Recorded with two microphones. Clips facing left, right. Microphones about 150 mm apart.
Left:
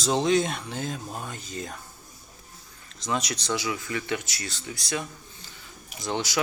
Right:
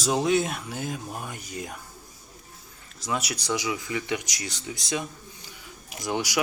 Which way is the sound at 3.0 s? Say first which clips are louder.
Left 1 dB; 5° right (ahead or behind).